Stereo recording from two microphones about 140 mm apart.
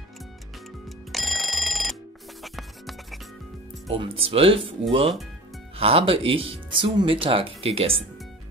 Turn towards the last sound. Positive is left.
turn(degrees=-45)  # may be behind; listen again after turning